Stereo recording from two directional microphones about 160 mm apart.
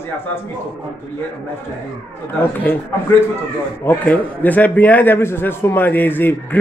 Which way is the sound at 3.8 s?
10° left (ahead or behind).